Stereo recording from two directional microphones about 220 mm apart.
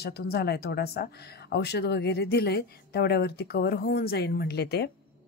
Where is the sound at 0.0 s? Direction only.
45° left (ahead or behind).